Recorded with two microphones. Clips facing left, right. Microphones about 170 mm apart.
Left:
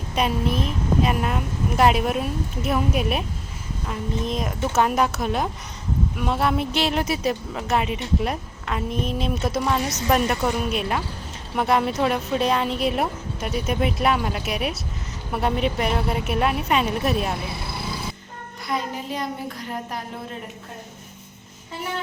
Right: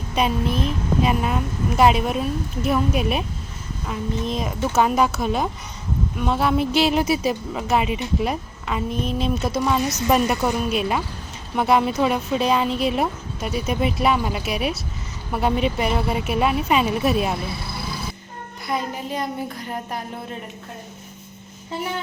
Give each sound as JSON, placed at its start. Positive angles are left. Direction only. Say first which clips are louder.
{"t": 0.2, "sound": "a woman's voice", "louder": "right 1 dB", "side_deg": 0}
{"t": 18.7, "sound": "a woman's voice", "louder": "right 1 dB", "side_deg": 0}